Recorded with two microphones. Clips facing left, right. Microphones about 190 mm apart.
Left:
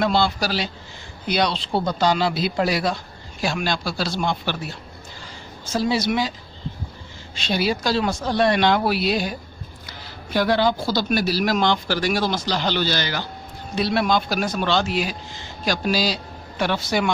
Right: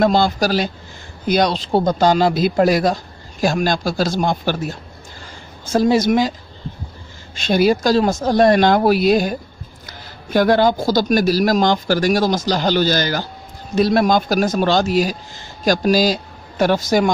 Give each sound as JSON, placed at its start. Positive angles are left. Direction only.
{"t": 0.0, "sound": "speech", "side_deg": -45}
{"t": 7.3, "sound": "speech", "side_deg": -45}